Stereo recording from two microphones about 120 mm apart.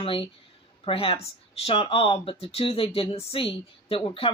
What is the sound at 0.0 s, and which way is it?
Speech, 50° left (ahead or behind).